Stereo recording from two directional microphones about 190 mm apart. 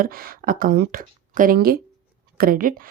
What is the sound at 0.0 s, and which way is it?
A woman's voice, 50° right (ahead or behind).